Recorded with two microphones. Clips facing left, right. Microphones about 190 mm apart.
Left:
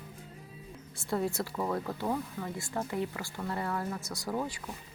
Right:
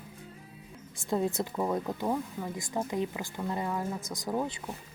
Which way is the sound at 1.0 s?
20° right (ahead or behind).